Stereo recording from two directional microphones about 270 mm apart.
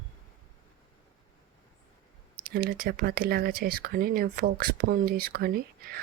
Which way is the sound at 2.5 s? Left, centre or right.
Right.